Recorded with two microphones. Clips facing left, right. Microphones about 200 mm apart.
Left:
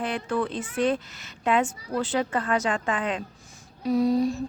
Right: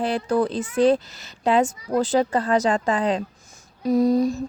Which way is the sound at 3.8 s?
45° right (ahead or behind).